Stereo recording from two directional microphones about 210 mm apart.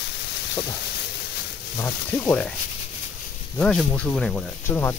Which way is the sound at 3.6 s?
5° left (ahead or behind).